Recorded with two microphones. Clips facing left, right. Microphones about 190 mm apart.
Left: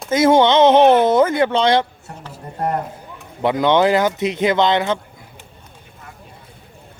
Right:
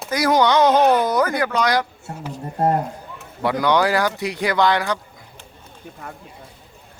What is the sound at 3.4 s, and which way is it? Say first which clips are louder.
A man's voice: left 3 dB; 20° left (ahead or behind).